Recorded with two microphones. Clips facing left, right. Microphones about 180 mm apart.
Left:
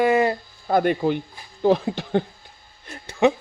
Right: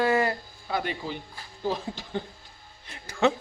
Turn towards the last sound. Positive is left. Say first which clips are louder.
# left 5 dB
turn(degrees=15)  # may be behind; listen again after turning